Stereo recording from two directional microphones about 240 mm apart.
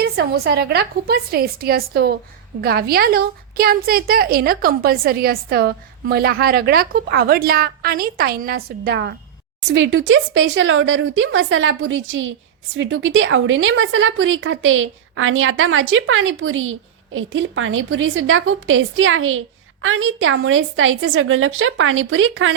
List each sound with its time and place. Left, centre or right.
0.0 s a woman's voice: right